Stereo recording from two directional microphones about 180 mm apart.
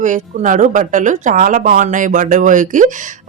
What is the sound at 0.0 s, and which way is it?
A woman's voice, 45° right (ahead or behind).